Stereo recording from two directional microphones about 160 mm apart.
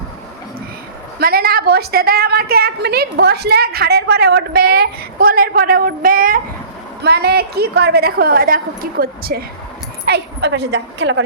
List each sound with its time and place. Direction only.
1.2 s a woman's voice: 70° right (ahead or behind)
7.0 s a woman's voice: 90° right; by 9.4 s 70° right (ahead or behind)
10.1 s a woman's voice: 90° right